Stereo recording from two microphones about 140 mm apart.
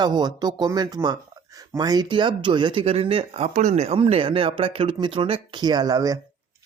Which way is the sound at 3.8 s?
45° right (ahead or behind).